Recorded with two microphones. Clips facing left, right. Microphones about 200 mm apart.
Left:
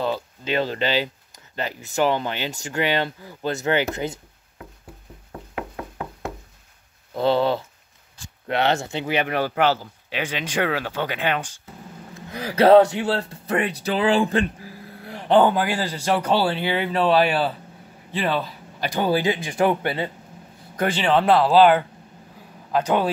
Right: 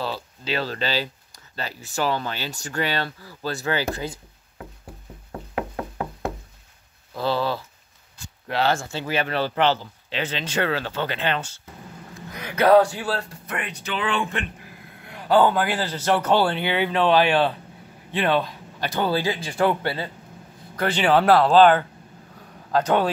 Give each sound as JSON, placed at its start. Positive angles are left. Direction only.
{"t": 0.0, "sound": "speech", "side_deg": 20}
{"t": 7.2, "sound": "speech", "side_deg": 25}
{"t": 12.4, "sound": "speech", "side_deg": 30}
{"t": 21.0, "sound": "a man's voice", "side_deg": -5}